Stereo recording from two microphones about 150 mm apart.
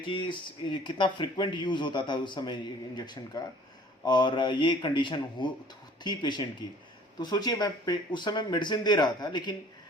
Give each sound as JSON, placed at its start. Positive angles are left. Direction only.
{"t": 0.0, "sound": "speech", "side_deg": 35}